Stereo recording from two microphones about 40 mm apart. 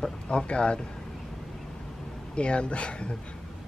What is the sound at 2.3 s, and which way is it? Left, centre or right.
Speech, left.